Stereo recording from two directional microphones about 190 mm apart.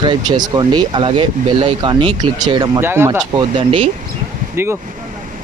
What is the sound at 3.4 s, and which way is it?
Speech, 25° right (ahead or behind).